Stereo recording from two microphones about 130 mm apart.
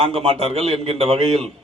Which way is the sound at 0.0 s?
50° right (ahead or behind).